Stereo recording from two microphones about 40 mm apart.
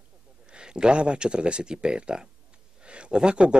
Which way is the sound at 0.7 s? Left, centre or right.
Right.